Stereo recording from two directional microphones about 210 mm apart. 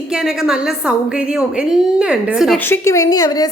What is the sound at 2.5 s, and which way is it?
Speech, 10° left (ahead or behind).